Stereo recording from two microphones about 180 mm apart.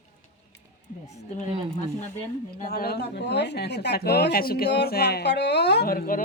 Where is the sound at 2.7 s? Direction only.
60° left (ahead or behind).